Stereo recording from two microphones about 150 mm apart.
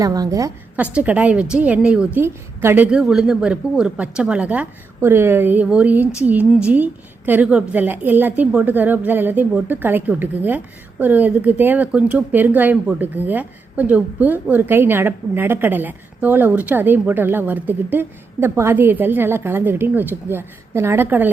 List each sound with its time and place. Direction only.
0.0 s a woman's voice: 25° right (ahead or behind)
0.9 s a woman's voice: 10° right (ahead or behind)